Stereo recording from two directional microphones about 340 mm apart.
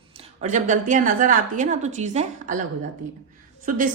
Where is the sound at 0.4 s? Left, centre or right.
Right.